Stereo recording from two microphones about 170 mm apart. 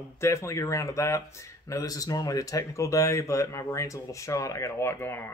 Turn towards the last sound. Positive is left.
turn(degrees=15)  # may be behind; listen again after turning